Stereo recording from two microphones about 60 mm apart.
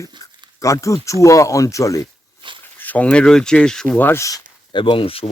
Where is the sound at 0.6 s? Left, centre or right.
Left.